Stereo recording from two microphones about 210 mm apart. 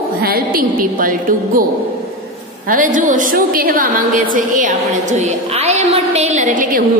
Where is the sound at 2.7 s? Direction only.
40° right (ahead or behind).